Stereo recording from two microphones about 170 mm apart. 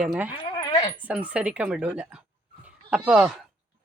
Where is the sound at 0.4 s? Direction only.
25° left (ahead or behind).